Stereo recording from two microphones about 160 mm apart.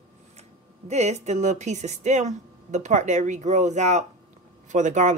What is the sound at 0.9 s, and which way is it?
Speech, 45° right (ahead or behind).